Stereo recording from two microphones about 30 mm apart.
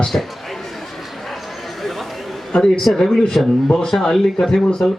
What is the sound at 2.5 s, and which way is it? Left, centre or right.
Speech, left.